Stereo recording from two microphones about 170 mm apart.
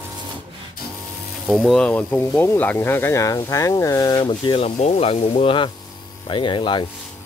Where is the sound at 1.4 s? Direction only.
Centre (ahead or behind); by 6.8 s 30° left (ahead or behind).